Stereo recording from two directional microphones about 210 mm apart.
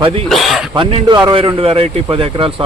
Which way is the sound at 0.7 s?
25° right (ahead or behind).